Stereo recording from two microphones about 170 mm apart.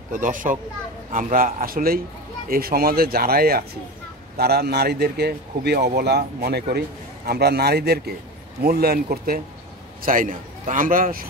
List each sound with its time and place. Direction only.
0.1 s a man's voice: 50° right (ahead or behind)
10.0 s a man's voice: 50° right (ahead or behind)